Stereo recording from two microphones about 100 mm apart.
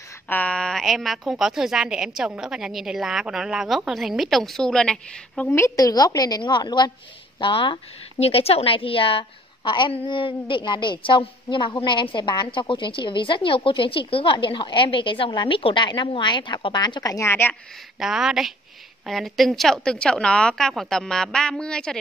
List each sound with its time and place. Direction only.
0.3 s a woman's voice: 10° left (ahead or behind)
5.5 s a woman's voice: 30° left (ahead or behind)
17.3 s a woman's voice: 20° left (ahead or behind)
17.9 s a woman's voice: 5° right (ahead or behind)